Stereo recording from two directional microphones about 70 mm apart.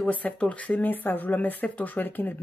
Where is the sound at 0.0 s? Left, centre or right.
Centre.